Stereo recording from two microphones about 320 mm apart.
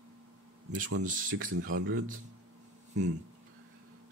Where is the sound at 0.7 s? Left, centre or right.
Right.